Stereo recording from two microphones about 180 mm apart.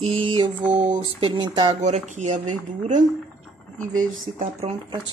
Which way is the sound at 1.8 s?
40° right (ahead or behind).